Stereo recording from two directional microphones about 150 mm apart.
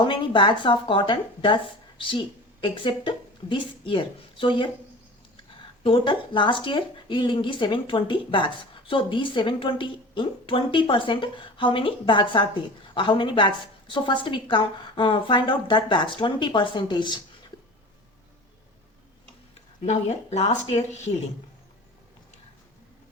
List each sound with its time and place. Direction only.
0.0 s speech: 30° left (ahead or behind)
19.8 s speech: 45° left (ahead or behind)